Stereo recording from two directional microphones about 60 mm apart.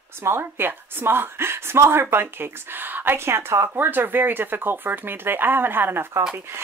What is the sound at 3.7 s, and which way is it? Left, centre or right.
Speech, right.